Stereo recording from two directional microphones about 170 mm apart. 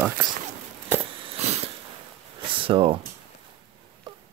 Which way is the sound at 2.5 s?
30° right (ahead or behind).